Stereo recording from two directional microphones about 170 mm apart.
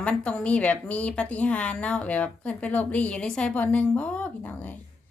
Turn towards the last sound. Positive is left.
turn(degrees=10)  # may be behind; listen again after turning